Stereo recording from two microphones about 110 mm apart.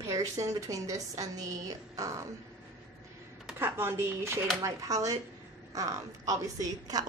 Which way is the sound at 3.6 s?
20° right (ahead or behind).